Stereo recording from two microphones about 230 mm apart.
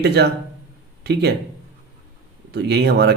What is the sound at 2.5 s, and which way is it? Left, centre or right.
Speech, right.